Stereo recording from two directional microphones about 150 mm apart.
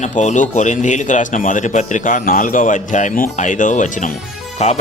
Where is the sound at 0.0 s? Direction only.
55° left (ahead or behind).